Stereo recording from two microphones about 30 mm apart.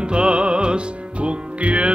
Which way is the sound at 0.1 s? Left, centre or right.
Right.